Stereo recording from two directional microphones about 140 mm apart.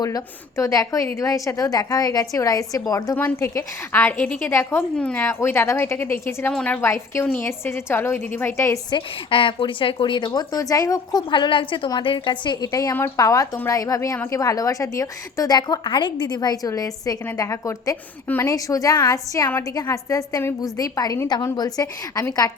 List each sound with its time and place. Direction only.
0.0 s a woman's voice: 25° left (ahead or behind)
6.5 s a woman's voice: 5° left (ahead or behind)
6.8 s a woman's voice: 20° left (ahead or behind)